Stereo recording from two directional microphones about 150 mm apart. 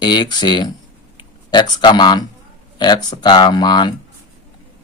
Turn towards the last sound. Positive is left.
turn(degrees=30)  # may be behind; listen again after turning